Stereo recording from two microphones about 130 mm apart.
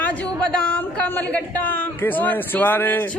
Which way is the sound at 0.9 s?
10° left (ahead or behind).